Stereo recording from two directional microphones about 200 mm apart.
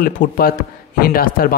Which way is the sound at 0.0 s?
45° left (ahead or behind).